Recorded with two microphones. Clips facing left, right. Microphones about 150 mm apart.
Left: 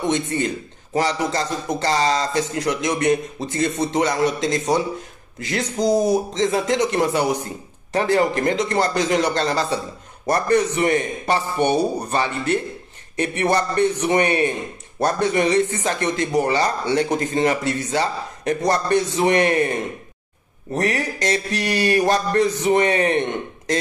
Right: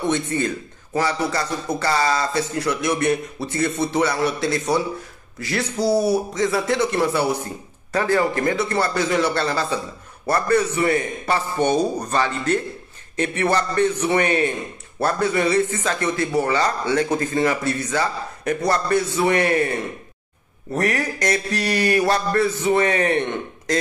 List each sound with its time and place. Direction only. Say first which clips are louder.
0.0 s a man's voice: even; 15° left (ahead or behind)